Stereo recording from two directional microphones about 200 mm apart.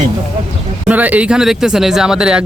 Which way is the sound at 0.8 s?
5° right (ahead or behind).